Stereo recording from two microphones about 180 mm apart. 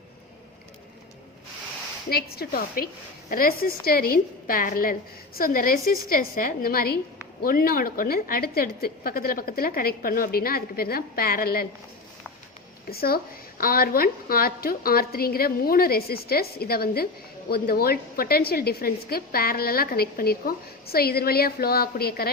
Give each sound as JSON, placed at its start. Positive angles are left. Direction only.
{"t": 2.0, "sound": "a woman's voice", "side_deg": 60}
{"t": 12.9, "sound": "a woman's voice", "side_deg": 55}